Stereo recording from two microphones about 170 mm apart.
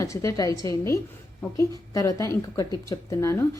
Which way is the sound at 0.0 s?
20° left (ahead or behind).